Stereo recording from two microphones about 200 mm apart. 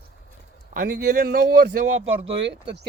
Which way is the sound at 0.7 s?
45° right (ahead or behind).